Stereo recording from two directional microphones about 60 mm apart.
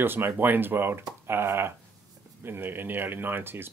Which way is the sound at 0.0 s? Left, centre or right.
Right.